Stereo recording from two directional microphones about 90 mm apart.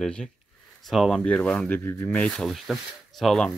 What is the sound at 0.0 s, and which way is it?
Speech, 10° left (ahead or behind).